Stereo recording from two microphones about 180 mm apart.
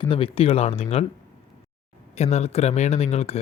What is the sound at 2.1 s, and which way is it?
Speech, 35° left (ahead or behind).